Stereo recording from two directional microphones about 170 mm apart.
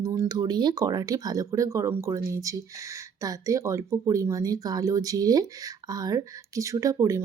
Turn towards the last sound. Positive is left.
turn(degrees=-20)  # may be behind; listen again after turning